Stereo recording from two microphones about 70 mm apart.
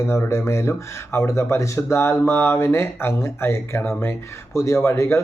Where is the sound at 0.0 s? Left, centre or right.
Left.